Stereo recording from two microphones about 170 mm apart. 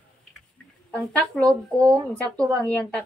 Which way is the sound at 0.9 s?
5° left (ahead or behind).